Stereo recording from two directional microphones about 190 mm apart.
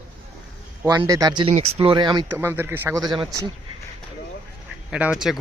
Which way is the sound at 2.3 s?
10° right (ahead or behind).